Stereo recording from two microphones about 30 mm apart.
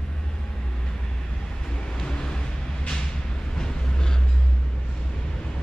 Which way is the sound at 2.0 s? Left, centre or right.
Left.